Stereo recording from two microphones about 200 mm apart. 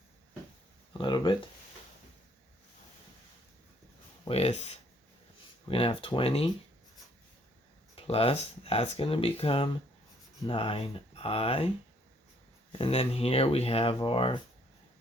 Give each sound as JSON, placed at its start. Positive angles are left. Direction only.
{"t": 0.9, "sound": "speech", "side_deg": 25}
{"t": 4.3, "sound": "speech", "side_deg": 30}
{"t": 7.9, "sound": "speech", "side_deg": 30}
{"t": 12.8, "sound": "speech", "side_deg": 30}